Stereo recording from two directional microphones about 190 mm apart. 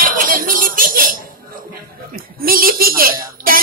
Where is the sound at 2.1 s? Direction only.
50° right (ahead or behind).